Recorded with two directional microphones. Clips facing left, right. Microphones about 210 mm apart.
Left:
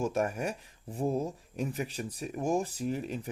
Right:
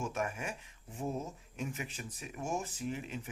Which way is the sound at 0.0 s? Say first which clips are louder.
Left 7 dB; 35° left (ahead or behind).